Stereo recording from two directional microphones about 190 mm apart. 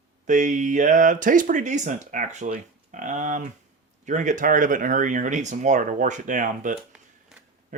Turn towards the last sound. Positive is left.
turn(degrees=0)  # may be behind; listen again after turning